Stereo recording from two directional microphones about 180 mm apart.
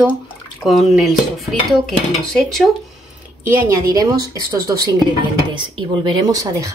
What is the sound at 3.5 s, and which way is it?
A woman's voice, 20° right (ahead or behind).